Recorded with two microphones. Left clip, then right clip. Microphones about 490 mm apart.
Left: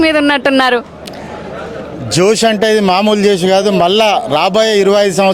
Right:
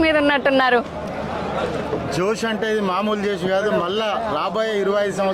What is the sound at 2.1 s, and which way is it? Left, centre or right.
A man's voice, left.